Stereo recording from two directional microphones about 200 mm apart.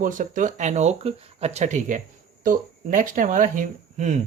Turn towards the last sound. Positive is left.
turn(degrees=-40)  # may be behind; listen again after turning